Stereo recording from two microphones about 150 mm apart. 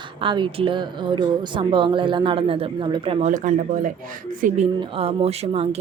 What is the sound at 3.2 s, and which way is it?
Speech, 60° right (ahead or behind).